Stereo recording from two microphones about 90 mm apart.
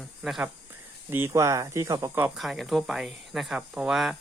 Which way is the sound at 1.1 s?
30° right (ahead or behind).